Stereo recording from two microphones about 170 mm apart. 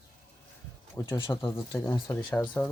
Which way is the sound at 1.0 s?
20° left (ahead or behind).